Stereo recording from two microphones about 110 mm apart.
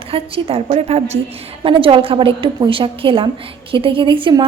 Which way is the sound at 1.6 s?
50° right (ahead or behind).